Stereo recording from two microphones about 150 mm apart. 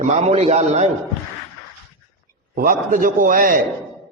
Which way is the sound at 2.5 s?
65° right (ahead or behind).